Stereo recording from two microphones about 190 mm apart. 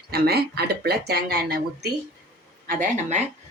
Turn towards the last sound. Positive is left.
turn(degrees=-45)  # may be behind; listen again after turning